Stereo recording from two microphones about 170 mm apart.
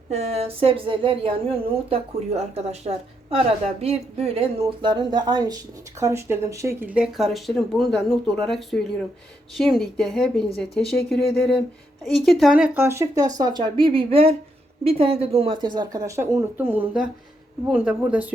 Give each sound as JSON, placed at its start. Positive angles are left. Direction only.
{"t": 0.1, "sound": "a woman's voice", "side_deg": -40}